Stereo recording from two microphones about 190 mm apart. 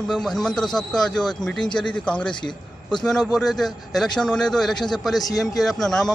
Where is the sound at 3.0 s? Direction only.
Centre (ahead or behind).